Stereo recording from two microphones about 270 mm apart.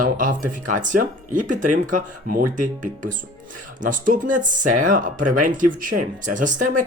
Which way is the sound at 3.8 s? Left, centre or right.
Right.